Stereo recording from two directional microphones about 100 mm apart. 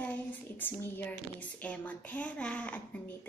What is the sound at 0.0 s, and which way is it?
Speech, 20° left (ahead or behind).